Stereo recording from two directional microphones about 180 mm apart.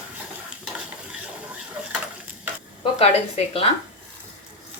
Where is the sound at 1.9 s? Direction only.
10° right (ahead or behind).